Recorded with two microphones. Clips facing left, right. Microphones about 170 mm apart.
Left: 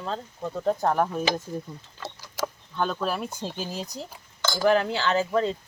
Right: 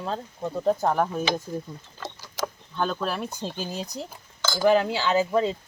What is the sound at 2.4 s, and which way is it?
Speech, centre (ahead or behind).